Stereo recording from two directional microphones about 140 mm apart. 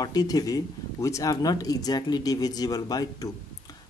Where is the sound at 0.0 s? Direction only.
25° left (ahead or behind).